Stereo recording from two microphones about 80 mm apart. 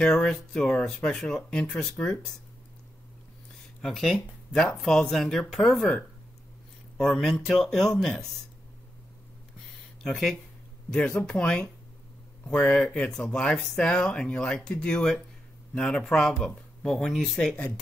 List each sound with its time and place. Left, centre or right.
0.0 s speech: centre
3.8 s speech: centre
7.0 s speech: centre
10.0 s speech: centre